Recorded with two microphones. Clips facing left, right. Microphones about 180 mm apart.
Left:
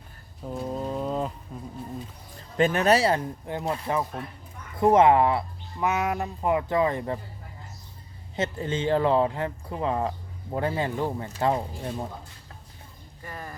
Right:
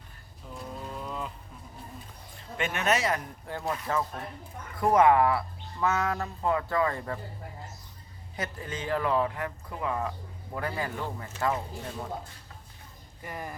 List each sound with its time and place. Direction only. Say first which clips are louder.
0.7 s a sound: left 9 dB; 40° left (ahead or behind)
2.6 s speech: left 7 dB; 35° left (ahead or behind)
8.4 s speech: left 8 dB; 25° left (ahead or behind)
13.2 s speech: right 1 dB; 15° right (ahead or behind)